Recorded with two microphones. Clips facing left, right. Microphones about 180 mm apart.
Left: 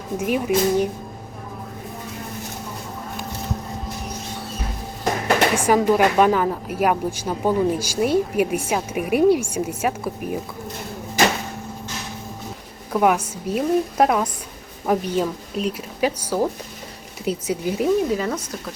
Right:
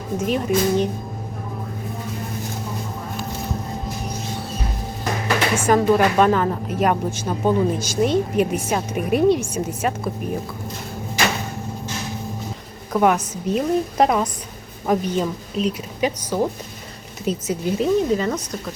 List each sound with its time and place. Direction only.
0.2 s a woman's voice: 10° left (ahead or behind)
5.5 s a woman's voice: 15° left (ahead or behind)
12.9 s a woman's voice: 5° left (ahead or behind)